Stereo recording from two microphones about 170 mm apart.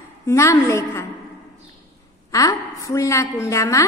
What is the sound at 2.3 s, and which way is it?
A woman's voice, 20° left (ahead or behind).